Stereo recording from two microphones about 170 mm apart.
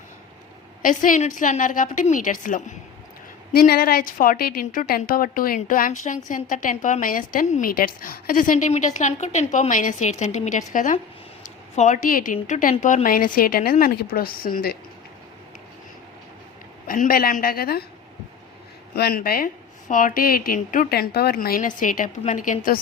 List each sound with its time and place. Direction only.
0.8 s a woman's voice: 50° left (ahead or behind)
3.5 s a woman's voice: 65° left (ahead or behind)
16.8 s a woman's voice: 55° left (ahead or behind)
18.9 s a woman's voice: 65° left (ahead or behind)